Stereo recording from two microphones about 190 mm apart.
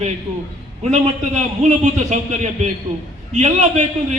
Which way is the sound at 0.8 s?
35° right (ahead or behind).